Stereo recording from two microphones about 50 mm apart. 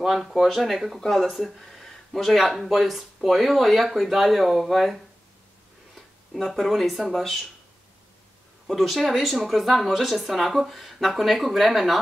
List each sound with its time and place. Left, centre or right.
0.0 s speech: centre
5.9 s a sound: centre
6.8 s speech: centre
8.6 s speech: centre